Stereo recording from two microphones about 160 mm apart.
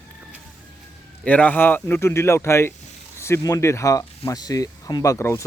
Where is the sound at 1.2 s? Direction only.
10° left (ahead or behind).